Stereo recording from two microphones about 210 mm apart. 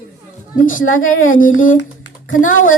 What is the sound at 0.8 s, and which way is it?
Speech, 70° left (ahead or behind).